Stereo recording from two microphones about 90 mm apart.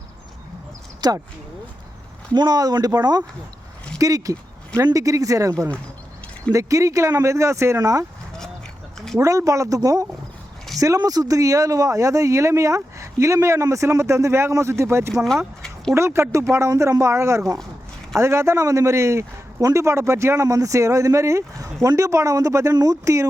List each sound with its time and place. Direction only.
1.0 s speech: 50° right (ahead or behind)
2.3 s speech: 50° right (ahead or behind)
9.1 s speech: 40° right (ahead or behind)
15.1 s speech: 5° left (ahead or behind)
15.6 s a sound: 5° left (ahead or behind)
16.0 s speech: 30° right (ahead or behind)